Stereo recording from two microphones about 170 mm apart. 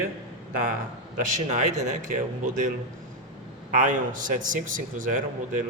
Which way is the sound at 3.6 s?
55° right (ahead or behind).